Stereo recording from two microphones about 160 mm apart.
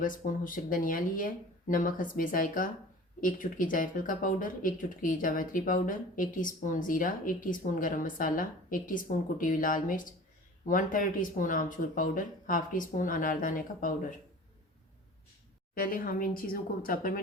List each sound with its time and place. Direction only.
0.0 s speech: 55° left (ahead or behind)
15.7 s speech: 60° left (ahead or behind)